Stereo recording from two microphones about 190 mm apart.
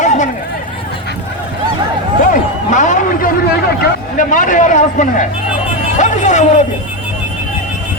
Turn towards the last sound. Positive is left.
turn(degrees=40)  # may be behind; listen again after turning